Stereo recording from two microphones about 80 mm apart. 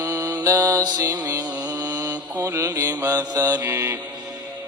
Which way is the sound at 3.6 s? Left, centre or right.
Right.